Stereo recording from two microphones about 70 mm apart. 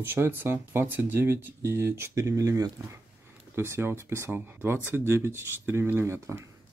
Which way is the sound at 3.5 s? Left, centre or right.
Right.